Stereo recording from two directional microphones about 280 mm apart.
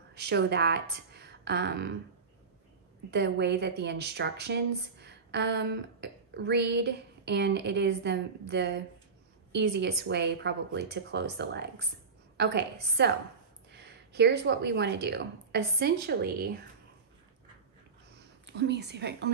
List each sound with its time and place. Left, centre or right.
0.1 s a woman's voice: right
3.1 s a woman's voice: right
18.5 s a woman's voice: right